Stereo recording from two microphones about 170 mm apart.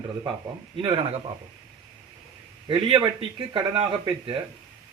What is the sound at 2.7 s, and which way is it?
Speech, 25° right (ahead or behind).